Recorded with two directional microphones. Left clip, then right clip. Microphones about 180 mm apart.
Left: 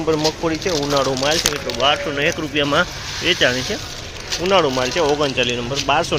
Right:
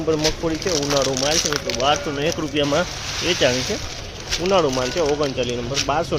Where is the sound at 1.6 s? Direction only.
20° right (ahead or behind); by 6.2 s centre (ahead or behind).